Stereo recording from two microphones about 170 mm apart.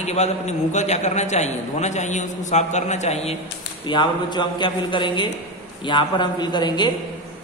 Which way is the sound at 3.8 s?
25° left (ahead or behind).